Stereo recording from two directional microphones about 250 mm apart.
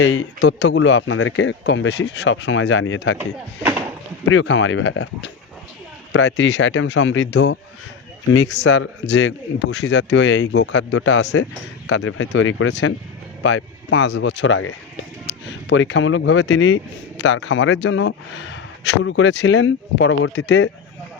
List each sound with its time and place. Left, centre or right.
0.0 s speech: left
3.2 s speech: centre
4.3 s speech: left